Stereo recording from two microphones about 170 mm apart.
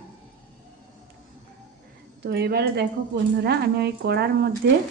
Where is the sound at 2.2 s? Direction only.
70° right (ahead or behind).